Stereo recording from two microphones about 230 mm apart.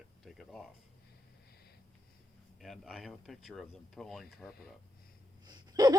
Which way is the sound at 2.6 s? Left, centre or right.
Centre.